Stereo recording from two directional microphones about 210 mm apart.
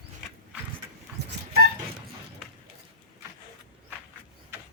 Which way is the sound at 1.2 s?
50° right (ahead or behind).